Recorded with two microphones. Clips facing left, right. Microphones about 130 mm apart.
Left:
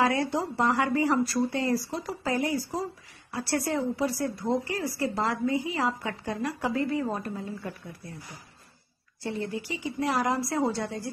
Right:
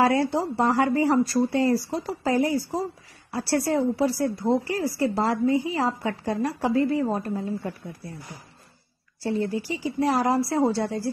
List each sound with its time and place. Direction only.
0.0 s a woman's voice: 30° right (ahead or behind)
9.2 s a woman's voice: 30° right (ahead or behind)